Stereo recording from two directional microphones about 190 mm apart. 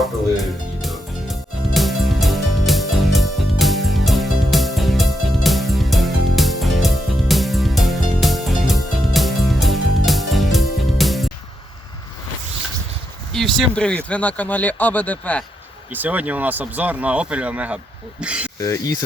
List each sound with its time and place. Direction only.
0.3 s music: centre (ahead or behind)
13.3 s speech: centre (ahead or behind)
15.9 s speech: 10° right (ahead or behind)
18.6 s speech: 15° left (ahead or behind)